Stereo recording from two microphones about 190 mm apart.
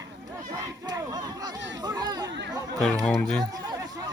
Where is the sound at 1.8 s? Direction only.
20° right (ahead or behind).